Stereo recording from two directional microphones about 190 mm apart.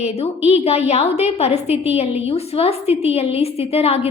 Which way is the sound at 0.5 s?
35° left (ahead or behind).